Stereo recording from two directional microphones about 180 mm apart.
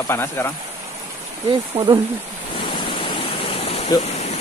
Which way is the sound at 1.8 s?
35° right (ahead or behind).